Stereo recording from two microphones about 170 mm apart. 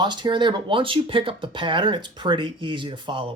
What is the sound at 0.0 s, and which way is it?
Speech, 25° right (ahead or behind).